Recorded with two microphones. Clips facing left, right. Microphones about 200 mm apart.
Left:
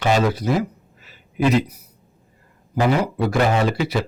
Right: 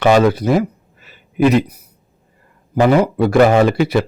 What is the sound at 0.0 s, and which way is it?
A man's voice, 65° right (ahead or behind).